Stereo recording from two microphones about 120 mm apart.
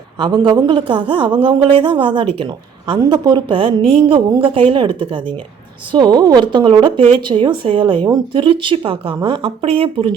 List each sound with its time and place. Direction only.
0.2 s a woman's voice: 40° right (ahead or behind)